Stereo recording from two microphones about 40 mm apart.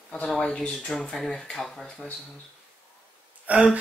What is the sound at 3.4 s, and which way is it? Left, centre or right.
Speech, right.